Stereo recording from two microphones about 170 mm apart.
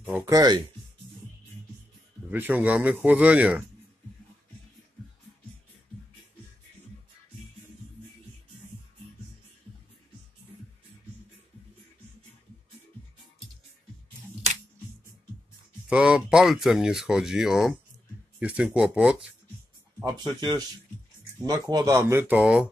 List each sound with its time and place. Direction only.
0.2 s speech: 20° right (ahead or behind)
2.3 s a man's voice: 10° right (ahead or behind)
15.9 s a man's voice: 5° right (ahead or behind)
20.0 s speech: 20° right (ahead or behind)
21.5 s a man's voice: 20° right (ahead or behind)